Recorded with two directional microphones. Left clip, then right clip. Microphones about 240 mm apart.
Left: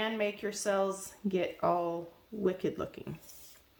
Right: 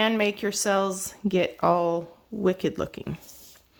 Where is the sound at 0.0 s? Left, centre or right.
Right.